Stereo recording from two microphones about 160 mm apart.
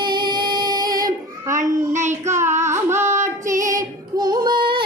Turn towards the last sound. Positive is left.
turn(degrees=-30)  # may be behind; listen again after turning